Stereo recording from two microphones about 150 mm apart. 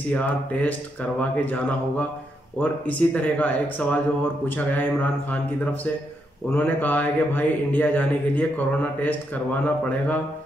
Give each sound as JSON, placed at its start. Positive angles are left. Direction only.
{"t": 0.1, "sound": "a man's voice", "side_deg": 10}
{"t": 6.5, "sound": "a man's voice", "side_deg": 10}